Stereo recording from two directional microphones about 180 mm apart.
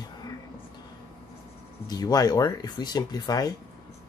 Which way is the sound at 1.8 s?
20° left (ahead or behind).